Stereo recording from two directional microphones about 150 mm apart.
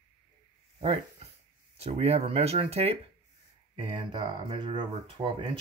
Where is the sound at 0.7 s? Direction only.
40° right (ahead or behind).